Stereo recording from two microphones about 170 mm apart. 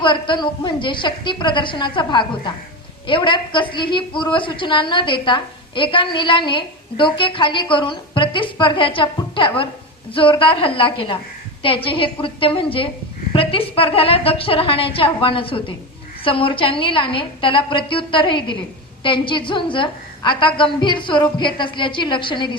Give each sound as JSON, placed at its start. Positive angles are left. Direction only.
{"t": 0.0, "sound": "a woman's voice", "side_deg": 30}